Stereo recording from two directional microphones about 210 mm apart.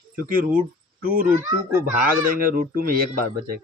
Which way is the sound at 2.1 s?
40° right (ahead or behind).